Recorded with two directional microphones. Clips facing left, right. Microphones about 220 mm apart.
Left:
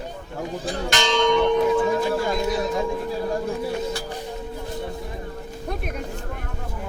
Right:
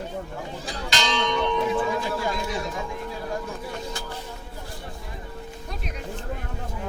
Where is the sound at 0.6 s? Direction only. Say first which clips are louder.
Left 4 dB; 50° left (ahead or behind).